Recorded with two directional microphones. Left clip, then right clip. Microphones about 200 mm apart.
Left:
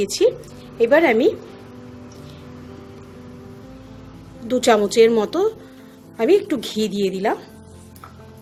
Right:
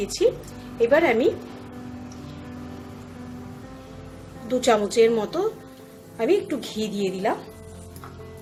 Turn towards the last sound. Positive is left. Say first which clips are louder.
# left 4 dB
turn(degrees=50)  # may be behind; listen again after turning